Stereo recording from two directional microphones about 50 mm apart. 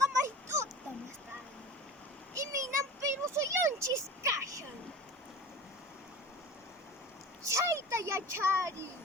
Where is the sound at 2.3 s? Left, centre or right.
Right.